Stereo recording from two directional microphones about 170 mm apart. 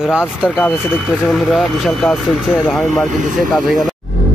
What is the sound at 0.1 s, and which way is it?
Speech, 5° right (ahead or behind).